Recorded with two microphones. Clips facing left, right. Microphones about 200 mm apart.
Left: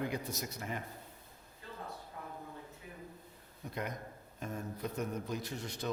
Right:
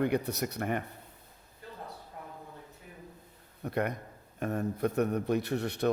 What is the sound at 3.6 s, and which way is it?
Speech, 65° right (ahead or behind).